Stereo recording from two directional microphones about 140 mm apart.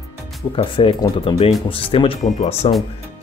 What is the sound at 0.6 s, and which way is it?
Speech, 40° left (ahead or behind).